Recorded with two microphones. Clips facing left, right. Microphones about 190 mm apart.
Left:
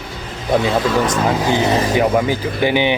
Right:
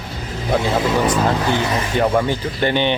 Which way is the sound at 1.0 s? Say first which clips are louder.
Even; 10° right (ahead or behind).